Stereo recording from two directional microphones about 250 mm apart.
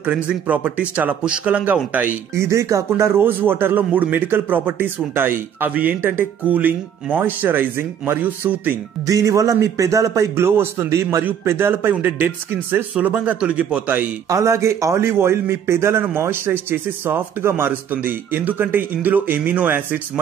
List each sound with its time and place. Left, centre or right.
0.0 s speech: centre